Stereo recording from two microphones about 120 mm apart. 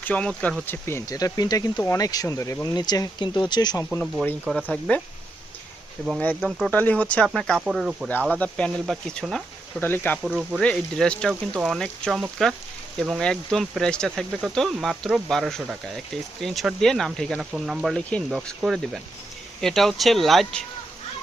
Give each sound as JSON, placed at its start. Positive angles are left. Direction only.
{"t": 0.0, "sound": "speech", "side_deg": 10}
{"t": 0.7, "sound": "speech", "side_deg": 20}
{"t": 3.8, "sound": "speech", "side_deg": 0}
{"t": 6.1, "sound": "speech", "side_deg": 5}
{"t": 8.3, "sound": "speech", "side_deg": 10}
{"t": 9.8, "sound": "speech", "side_deg": 15}
{"t": 10.2, "sound": "speech", "side_deg": -5}
{"t": 10.6, "sound": "speech", "side_deg": 5}
{"t": 17.5, "sound": "speech", "side_deg": -5}
{"t": 17.9, "sound": "speech", "side_deg": 5}